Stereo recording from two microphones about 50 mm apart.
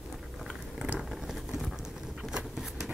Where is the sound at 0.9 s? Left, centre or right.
Centre.